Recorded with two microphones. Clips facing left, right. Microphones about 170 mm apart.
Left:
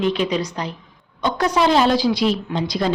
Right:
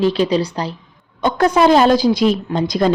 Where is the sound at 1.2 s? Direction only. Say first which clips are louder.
Right 5 dB; 50° right (ahead or behind).